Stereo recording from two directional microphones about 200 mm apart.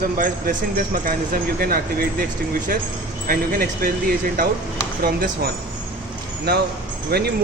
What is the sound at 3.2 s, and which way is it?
Speech, 45° right (ahead or behind).